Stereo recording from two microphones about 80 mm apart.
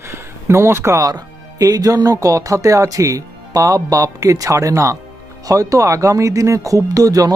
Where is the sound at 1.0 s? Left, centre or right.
Right.